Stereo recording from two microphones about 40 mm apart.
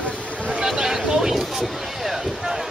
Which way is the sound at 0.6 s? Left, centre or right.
Centre.